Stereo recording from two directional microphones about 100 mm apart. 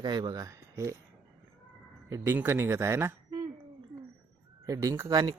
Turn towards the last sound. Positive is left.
turn(degrees=-35)  # may be behind; listen again after turning